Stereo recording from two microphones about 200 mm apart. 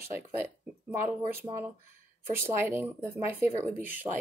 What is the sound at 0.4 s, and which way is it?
Speech, 10° right (ahead or behind).